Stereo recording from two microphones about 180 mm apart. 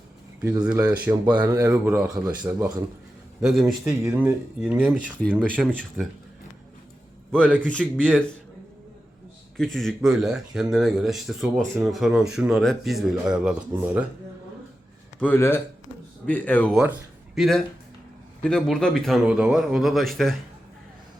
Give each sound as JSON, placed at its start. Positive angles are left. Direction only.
{"t": 0.6, "sound": "speech", "side_deg": -5}
{"t": 2.1, "sound": "speech", "side_deg": -20}
{"t": 2.5, "sound": "speech", "side_deg": -5}
{"t": 7.3, "sound": "speech", "side_deg": 5}
{"t": 9.6, "sound": "speech", "side_deg": 0}
{"t": 15.2, "sound": "speech", "side_deg": 10}